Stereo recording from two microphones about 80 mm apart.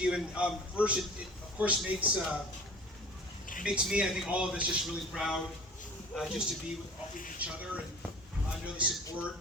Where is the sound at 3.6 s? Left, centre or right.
Centre.